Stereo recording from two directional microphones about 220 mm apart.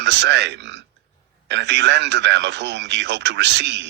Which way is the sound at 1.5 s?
50° right (ahead or behind).